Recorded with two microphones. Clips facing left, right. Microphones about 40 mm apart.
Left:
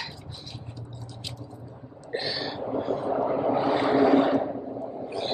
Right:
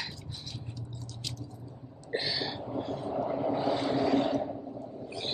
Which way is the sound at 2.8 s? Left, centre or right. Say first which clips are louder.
Left 8 dB; centre.